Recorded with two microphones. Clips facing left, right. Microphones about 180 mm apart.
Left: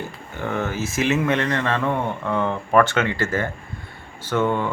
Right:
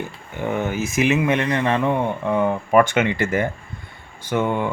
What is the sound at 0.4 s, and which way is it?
Speech, 15° right (ahead or behind).